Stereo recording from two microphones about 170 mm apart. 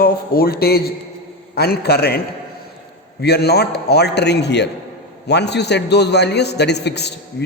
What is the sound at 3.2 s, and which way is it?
A man's voice, 70° left (ahead or behind).